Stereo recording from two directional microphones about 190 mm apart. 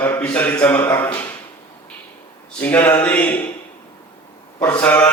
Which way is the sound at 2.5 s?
5° left (ahead or behind).